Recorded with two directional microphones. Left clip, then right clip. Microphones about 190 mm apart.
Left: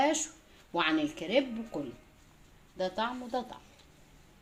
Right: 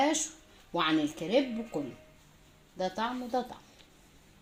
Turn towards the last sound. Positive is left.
turn(degrees=-35)  # may be behind; listen again after turning